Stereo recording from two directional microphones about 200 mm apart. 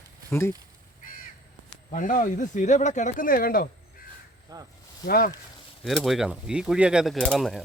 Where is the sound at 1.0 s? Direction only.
45° left (ahead or behind).